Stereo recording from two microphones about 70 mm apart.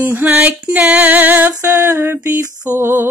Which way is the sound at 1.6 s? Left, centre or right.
Right.